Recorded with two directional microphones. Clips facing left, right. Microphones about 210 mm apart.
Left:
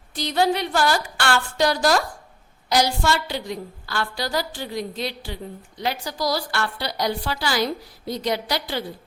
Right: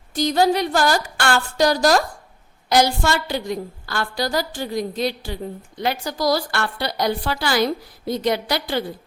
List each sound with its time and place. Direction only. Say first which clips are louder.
0.1 s a woman's voice: right 4 dB; 45° right (ahead or behind)